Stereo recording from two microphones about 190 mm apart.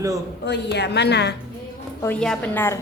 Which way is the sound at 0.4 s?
65° left (ahead or behind).